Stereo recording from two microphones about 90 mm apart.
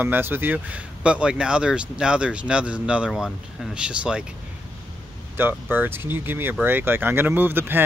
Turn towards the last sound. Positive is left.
turn(degrees=-25)  # may be behind; listen again after turning